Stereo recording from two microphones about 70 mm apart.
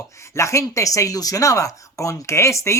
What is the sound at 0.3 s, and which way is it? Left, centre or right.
Speech, left.